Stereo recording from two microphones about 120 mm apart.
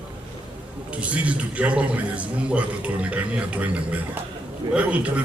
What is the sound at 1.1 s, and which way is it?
A man's voice, 10° right (ahead or behind).